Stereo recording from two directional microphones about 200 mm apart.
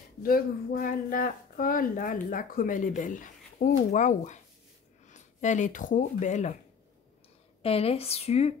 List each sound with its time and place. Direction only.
0.2 s speech: 45° left (ahead or behind)
7.6 s speech: 30° left (ahead or behind)